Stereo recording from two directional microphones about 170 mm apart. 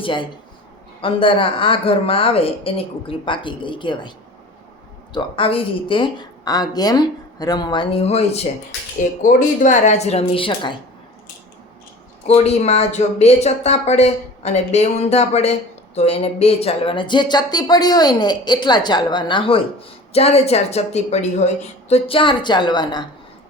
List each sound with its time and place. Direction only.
0.0 s speech: 30° left (ahead or behind)
5.1 s speech: 30° left (ahead or behind)
12.3 s speech: 40° left (ahead or behind)